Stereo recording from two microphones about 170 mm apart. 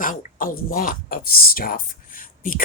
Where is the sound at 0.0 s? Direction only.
50° left (ahead or behind).